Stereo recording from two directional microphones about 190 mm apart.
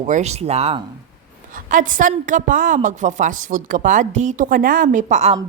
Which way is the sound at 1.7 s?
45° right (ahead or behind).